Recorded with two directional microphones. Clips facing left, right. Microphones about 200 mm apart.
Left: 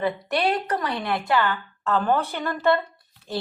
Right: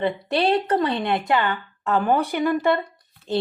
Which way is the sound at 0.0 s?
30° right (ahead or behind).